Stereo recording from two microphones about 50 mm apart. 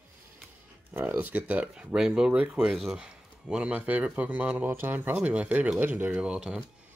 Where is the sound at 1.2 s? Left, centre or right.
Right.